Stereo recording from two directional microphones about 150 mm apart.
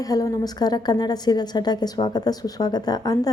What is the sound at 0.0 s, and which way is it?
A woman's voice, 25° left (ahead or behind).